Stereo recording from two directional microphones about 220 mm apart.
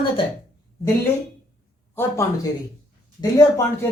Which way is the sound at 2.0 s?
15° left (ahead or behind).